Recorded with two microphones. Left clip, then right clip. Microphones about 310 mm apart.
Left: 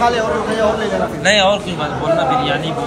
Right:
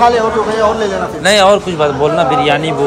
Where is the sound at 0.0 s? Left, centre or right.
Right.